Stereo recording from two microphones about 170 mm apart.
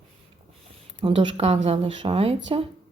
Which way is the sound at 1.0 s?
30° right (ahead or behind).